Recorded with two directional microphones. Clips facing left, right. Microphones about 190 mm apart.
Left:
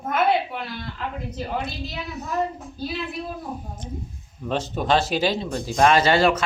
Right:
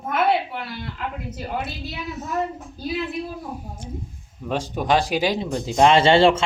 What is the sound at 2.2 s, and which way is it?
Speech, centre (ahead or behind).